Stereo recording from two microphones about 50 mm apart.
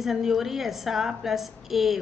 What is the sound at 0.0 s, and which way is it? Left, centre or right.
A woman's voice, centre.